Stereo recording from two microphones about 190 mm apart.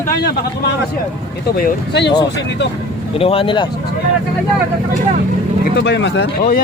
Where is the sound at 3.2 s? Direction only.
30° left (ahead or behind).